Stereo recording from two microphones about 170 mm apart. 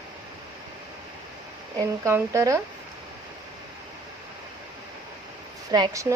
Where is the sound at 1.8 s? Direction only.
15° right (ahead or behind).